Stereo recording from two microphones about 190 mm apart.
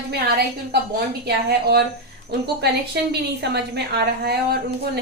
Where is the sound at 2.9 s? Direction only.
60° right (ahead or behind).